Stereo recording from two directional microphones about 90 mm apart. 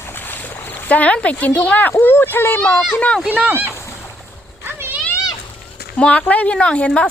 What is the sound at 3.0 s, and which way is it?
Speech, 10° left (ahead or behind).